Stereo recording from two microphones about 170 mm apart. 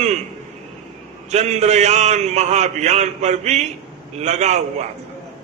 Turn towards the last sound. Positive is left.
turn(degrees=-40)  # may be behind; listen again after turning